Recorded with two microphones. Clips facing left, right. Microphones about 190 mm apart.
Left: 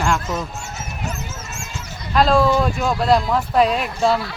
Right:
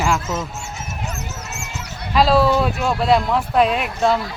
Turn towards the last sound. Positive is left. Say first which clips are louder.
# even
turn(degrees=0)  # may be behind; listen again after turning